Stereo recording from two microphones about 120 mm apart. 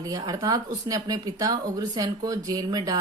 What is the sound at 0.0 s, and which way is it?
Speech, 30° right (ahead or behind).